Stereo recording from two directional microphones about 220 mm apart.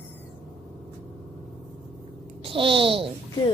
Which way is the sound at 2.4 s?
25° right (ahead or behind).